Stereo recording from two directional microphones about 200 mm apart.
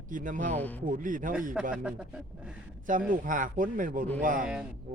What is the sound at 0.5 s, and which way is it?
Speech, 10° left (ahead or behind).